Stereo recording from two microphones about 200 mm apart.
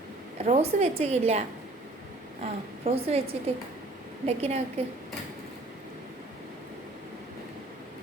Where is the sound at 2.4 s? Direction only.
30° right (ahead or behind).